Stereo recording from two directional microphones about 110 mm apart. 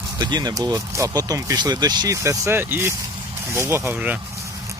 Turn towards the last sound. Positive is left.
turn(degrees=-15)  # may be behind; listen again after turning